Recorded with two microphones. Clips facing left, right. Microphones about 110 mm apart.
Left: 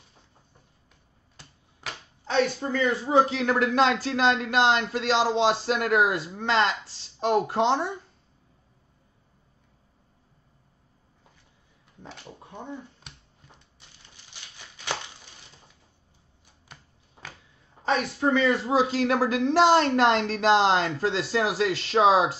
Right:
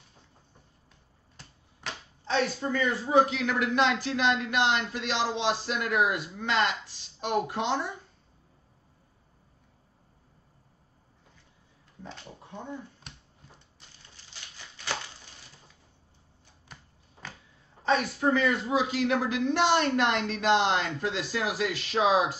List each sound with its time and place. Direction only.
1.3 s finger snapping: 5° left (ahead or behind)
2.7 s speech: 25° left (ahead or behind)
16.7 s a sound: centre (ahead or behind)
17.8 s speech: 25° left (ahead or behind)